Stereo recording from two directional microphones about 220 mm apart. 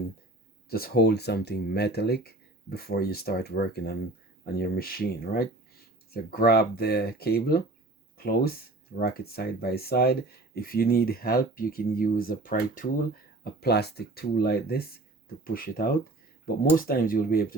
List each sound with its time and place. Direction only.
0.7 s speech: 45° left (ahead or behind)